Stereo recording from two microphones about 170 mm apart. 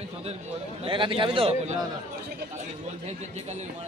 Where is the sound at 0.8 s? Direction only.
30° right (ahead or behind).